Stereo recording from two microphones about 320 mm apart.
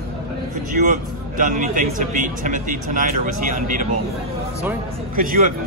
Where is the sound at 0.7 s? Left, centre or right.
Right.